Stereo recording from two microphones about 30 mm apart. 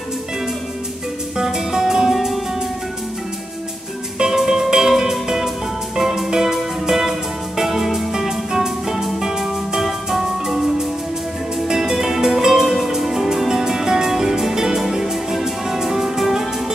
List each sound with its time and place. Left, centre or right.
1.4 s music: centre
2.1 s music: centre
4.3 s music: centre